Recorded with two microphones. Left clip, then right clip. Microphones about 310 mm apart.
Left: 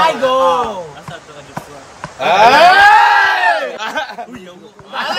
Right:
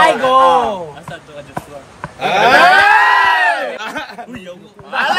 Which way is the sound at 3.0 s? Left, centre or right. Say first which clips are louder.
Left 1 dB; centre.